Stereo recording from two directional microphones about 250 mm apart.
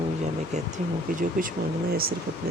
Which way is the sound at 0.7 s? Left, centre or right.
Right.